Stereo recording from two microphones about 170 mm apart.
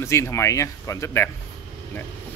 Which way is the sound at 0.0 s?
15° left (ahead or behind).